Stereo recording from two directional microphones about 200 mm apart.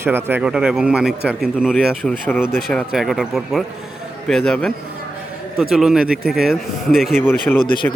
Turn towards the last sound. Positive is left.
turn(degrees=10)  # may be behind; listen again after turning